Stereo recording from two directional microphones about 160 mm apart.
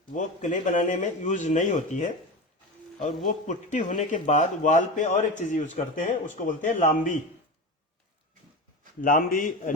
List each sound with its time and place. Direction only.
0.1 s speech: 50° left (ahead or behind)
3.4 s speech: 50° left (ahead or behind)
9.0 s a man's voice: 60° left (ahead or behind)